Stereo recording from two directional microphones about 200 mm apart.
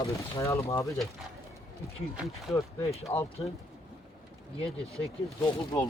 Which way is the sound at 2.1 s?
5° right (ahead or behind).